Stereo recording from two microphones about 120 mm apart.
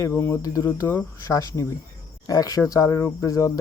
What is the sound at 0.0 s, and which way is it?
Speech, 25° left (ahead or behind).